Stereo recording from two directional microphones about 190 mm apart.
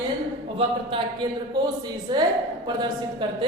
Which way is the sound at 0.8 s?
25° right (ahead or behind).